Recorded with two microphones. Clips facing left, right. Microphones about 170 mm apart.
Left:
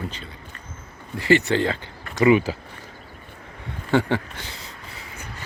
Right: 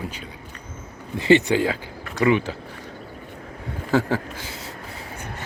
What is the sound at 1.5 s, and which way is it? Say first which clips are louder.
Speech: right 1 dB; 10° right (ahead or behind).